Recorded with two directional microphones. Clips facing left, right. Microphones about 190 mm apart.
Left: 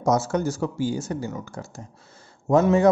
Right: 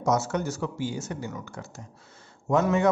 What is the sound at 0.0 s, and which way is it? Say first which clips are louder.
A man's voice: left 4 dB; 35° left (ahead or behind).